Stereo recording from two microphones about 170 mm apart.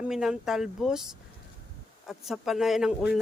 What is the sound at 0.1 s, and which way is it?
Speech, centre (ahead or behind).